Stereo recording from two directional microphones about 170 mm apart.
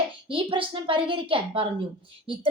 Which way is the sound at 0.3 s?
30° right (ahead or behind).